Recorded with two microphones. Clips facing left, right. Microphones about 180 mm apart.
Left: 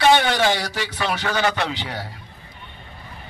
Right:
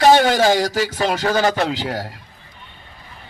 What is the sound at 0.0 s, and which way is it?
Speech, 40° right (ahead or behind).